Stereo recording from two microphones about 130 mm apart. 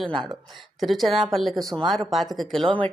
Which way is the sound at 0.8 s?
Centre (ahead or behind).